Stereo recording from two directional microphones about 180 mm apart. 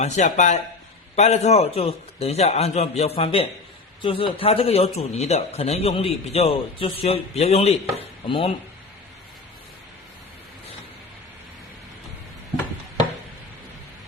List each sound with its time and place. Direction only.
0.0 s a man's voice: 40° left (ahead or behind)
7.9 s chopping: 30° left (ahead or behind)